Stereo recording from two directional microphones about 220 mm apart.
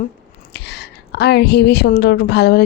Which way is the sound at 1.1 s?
50° left (ahead or behind).